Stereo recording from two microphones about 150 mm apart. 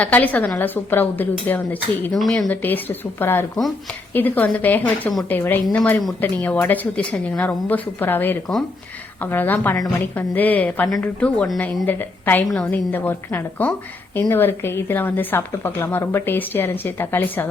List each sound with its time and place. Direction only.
0.0 s speech: 10° left (ahead or behind)
2.5 s speech: 10° left (ahead or behind)
9.7 s a woman's voice: 25° left (ahead or behind)
10.2 s speech: 10° left (ahead or behind)